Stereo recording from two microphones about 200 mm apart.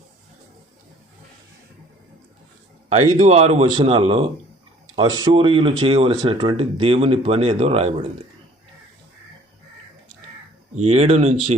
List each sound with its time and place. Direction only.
3.2 s speech: 30° right (ahead or behind)
10.8 s speech: 35° right (ahead or behind)